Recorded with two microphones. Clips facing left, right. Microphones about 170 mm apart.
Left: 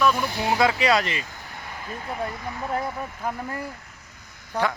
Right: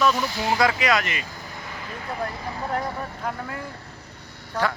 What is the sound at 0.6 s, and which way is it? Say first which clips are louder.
Speech: left 2 dB; 25° left (ahead or behind).